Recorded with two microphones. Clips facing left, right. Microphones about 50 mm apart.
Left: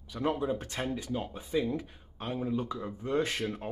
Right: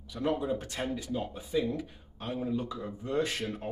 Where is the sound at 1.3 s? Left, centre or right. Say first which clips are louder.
Left 1 dB; left.